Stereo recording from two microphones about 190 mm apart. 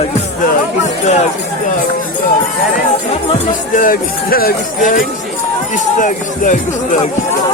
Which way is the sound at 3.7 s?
45° left (ahead or behind).